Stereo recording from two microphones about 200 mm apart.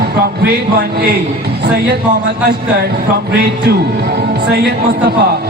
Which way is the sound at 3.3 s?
55° right (ahead or behind).